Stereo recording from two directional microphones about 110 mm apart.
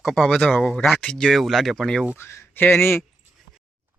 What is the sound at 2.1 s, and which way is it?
Speech, 20° left (ahead or behind).